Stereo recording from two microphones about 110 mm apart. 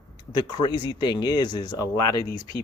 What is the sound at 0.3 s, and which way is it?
Speech, 45° left (ahead or behind).